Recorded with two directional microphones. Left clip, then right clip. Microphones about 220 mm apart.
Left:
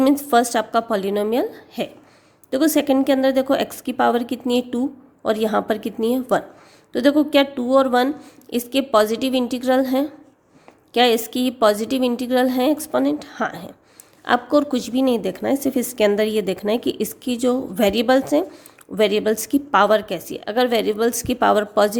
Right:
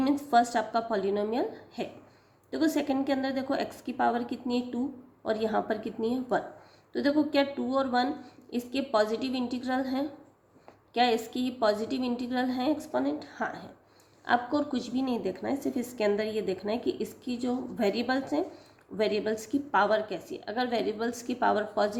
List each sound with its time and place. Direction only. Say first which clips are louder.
0.0 s a woman's voice: left 8 dB; 45° left (ahead or behind)